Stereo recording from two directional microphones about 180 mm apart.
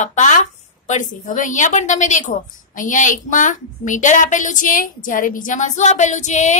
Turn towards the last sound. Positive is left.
turn(degrees=40)  # may be behind; listen again after turning